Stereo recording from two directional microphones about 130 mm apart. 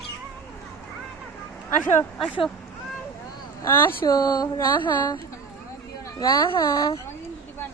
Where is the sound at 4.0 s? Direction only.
30° left (ahead or behind).